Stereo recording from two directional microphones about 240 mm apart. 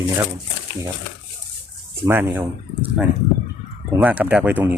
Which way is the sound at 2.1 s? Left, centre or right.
Centre.